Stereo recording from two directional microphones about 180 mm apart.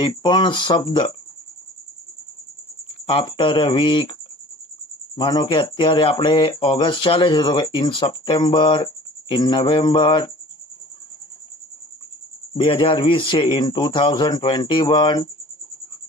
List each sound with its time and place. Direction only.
0.0 s speech: 25° left (ahead or behind)
3.1 s speech: 25° left (ahead or behind)
12.5 s speech: 30° left (ahead or behind)